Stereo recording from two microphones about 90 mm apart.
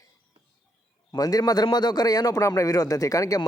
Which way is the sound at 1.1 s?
45° left (ahead or behind).